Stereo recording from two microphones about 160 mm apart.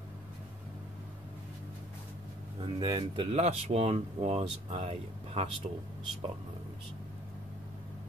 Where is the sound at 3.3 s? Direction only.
45° right (ahead or behind).